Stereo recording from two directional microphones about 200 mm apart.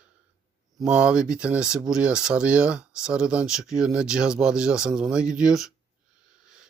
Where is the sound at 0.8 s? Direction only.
5° right (ahead or behind).